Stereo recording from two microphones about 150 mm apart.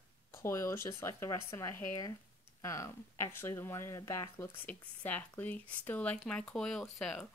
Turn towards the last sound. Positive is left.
turn(degrees=5)  # may be behind; listen again after turning